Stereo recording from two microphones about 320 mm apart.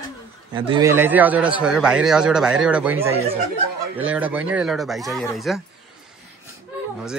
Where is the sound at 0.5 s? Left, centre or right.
Centre.